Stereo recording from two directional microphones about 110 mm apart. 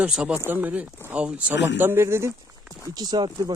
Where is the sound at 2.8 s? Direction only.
40° right (ahead or behind).